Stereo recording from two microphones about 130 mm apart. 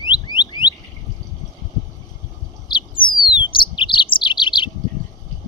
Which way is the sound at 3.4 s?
40° left (ahead or behind).